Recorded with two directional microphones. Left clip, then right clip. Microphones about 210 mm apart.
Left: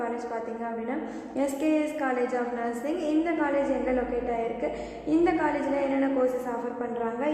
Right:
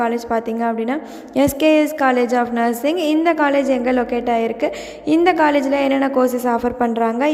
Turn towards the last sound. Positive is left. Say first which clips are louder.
# right 12 dB
turn(degrees=-50)  # may be behind; listen again after turning